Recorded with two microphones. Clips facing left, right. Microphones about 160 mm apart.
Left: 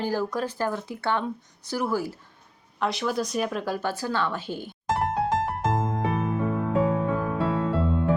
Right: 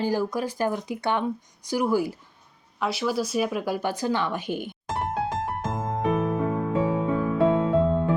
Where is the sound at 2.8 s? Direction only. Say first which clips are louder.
Right 1 dB; 5° right (ahead or behind).